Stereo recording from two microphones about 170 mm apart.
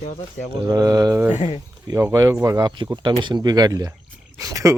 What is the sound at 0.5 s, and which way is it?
Speech, 20° right (ahead or behind).